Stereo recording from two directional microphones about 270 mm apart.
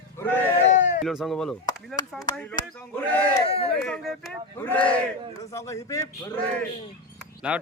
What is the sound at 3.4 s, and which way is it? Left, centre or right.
Speech, left.